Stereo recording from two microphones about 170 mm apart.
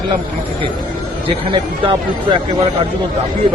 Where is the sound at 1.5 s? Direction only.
30° right (ahead or behind).